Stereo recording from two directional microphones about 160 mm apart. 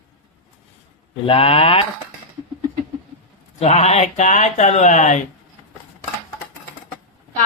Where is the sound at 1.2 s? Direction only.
35° left (ahead or behind).